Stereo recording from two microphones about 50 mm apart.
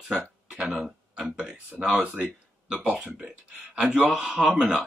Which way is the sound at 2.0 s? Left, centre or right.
Right.